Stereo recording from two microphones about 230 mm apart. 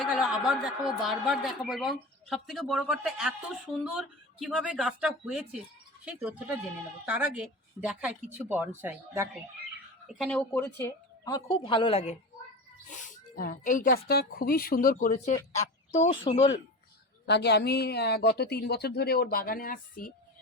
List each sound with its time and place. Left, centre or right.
0.0 s a man's voice: centre
10.1 s a woman's voice: centre; by 16.5 s left
17.2 s speech: left